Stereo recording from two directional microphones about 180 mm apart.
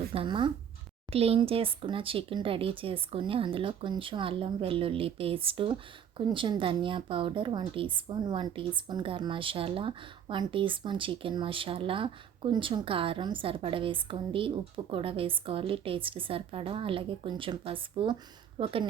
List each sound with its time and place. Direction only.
0.1 s speech: 30° right (ahead or behind)